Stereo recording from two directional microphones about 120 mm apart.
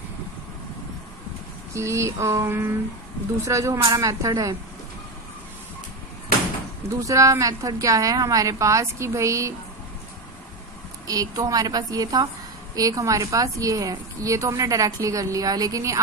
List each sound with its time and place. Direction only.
1.7 s a woman's voice: 25° right (ahead or behind)
6.9 s a woman's voice: 25° right (ahead or behind)
11.1 s a woman's voice: 30° right (ahead or behind)